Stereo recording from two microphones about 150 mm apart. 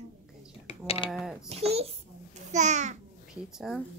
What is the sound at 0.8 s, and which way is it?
Speech, 40° left (ahead or behind).